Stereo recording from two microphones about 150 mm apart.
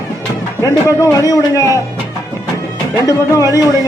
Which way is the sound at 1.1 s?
25° left (ahead or behind).